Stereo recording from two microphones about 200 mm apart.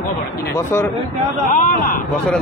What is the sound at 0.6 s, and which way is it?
Speech, 15° left (ahead or behind).